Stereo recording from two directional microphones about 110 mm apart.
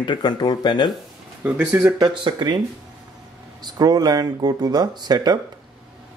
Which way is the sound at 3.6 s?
40° right (ahead or behind).